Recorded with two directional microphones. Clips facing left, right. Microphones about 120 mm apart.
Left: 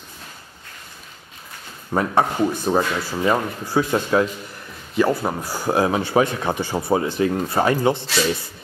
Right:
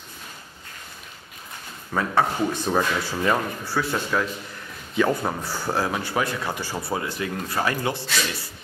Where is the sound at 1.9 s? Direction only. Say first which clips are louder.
Left 4 dB; 25° left (ahead or behind).